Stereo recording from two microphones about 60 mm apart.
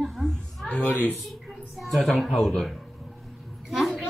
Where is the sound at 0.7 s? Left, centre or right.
Left.